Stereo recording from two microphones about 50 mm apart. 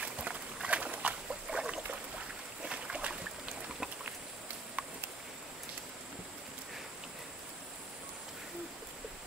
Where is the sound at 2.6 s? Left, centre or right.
Right.